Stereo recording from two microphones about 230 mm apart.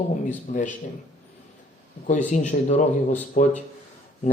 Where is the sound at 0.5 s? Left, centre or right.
Left.